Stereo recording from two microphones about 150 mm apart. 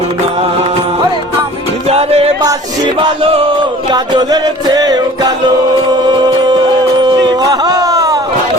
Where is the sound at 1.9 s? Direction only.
45° right (ahead or behind).